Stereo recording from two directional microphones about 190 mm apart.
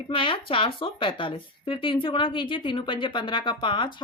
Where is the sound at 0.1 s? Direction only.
25° left (ahead or behind).